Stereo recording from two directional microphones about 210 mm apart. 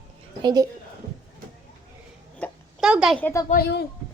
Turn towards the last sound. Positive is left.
turn(degrees=50)  # may be behind; listen again after turning